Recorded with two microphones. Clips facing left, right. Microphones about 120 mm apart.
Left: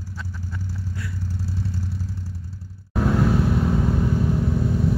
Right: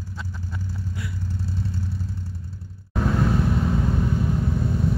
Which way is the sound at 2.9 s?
5° left (ahead or behind).